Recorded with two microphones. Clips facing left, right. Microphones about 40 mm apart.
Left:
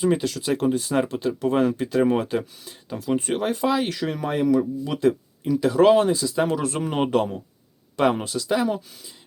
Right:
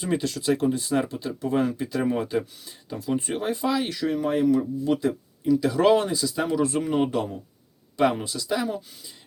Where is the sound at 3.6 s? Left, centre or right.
Left.